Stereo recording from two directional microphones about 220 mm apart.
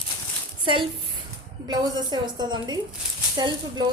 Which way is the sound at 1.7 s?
20° right (ahead or behind).